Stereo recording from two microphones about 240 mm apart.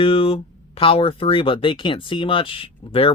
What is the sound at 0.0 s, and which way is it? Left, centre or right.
Speech, left.